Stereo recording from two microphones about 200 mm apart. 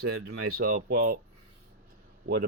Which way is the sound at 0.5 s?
45° right (ahead or behind).